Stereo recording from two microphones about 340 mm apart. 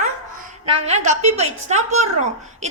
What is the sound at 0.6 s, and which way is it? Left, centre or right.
A woman's voice, centre.